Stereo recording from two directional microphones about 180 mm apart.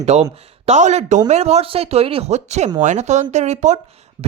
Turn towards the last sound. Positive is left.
turn(degrees=-40)  # may be behind; listen again after turning